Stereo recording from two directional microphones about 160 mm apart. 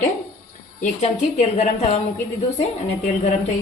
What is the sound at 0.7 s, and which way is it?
A woman's voice, 45° left (ahead or behind).